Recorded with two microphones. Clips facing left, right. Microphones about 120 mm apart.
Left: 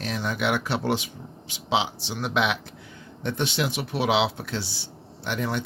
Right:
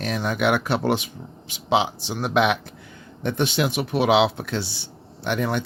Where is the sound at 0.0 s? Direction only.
55° right (ahead or behind).